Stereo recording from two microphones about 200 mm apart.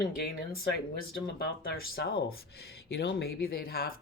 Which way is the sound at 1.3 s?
55° left (ahead or behind).